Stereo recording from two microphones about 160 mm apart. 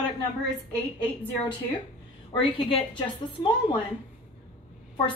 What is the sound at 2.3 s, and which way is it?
Speech, 35° left (ahead or behind).